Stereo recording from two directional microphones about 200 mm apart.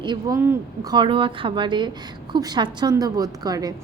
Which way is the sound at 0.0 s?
20° right (ahead or behind).